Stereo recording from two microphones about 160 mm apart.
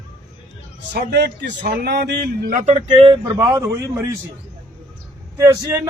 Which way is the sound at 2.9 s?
30° right (ahead or behind).